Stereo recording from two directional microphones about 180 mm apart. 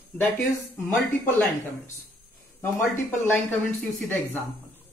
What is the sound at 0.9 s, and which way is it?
Speech, centre (ahead or behind).